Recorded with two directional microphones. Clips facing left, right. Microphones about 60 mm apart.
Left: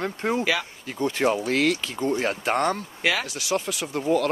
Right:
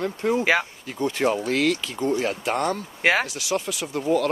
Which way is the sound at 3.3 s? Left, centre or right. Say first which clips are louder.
Even; left.